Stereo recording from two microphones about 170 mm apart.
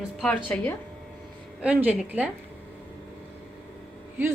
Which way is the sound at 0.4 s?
10° left (ahead or behind).